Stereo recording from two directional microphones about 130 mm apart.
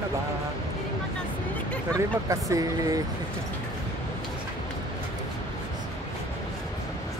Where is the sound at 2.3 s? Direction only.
25° right (ahead or behind).